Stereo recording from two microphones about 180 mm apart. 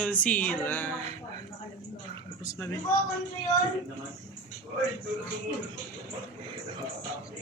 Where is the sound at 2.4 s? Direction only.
20° left (ahead or behind).